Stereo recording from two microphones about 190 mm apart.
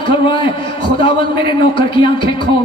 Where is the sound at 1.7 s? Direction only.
25° left (ahead or behind).